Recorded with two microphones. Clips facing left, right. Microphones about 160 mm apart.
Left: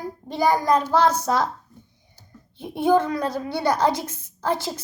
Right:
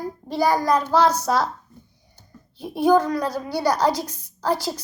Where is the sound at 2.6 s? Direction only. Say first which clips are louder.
Right 2 dB; 25° left (ahead or behind).